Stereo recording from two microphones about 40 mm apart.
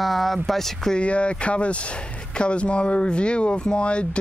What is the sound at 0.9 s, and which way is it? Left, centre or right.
Speech, left.